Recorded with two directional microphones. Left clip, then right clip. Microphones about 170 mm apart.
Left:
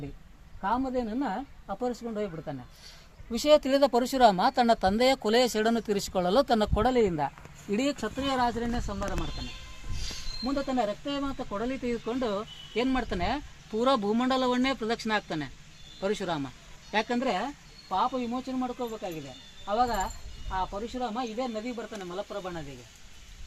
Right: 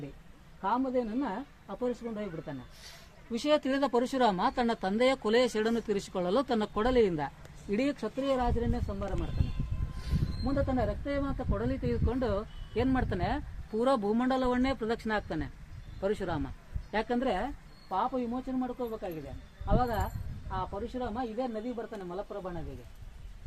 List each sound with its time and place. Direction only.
0.6 s speech: 90° left; by 7.3 s 65° left (ahead or behind)
7.3 s speech: 50° left (ahead or behind)
10.4 s speech: 40° left (ahead or behind)